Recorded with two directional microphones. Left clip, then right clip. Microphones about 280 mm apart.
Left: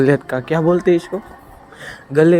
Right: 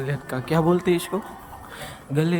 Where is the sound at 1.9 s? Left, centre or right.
Centre.